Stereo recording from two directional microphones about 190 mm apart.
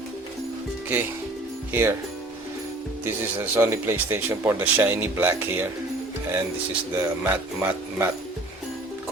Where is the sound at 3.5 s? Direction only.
15° right (ahead or behind).